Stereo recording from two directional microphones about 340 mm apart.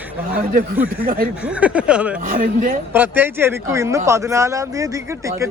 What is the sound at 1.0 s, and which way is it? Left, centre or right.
Speech, right.